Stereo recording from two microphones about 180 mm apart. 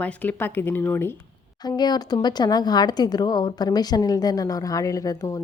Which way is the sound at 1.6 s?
25° left (ahead or behind).